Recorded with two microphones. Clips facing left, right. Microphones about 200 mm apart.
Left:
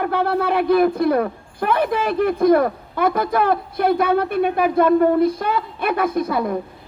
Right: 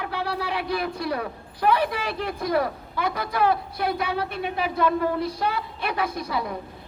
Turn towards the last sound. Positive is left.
turn(degrees=55)  # may be behind; listen again after turning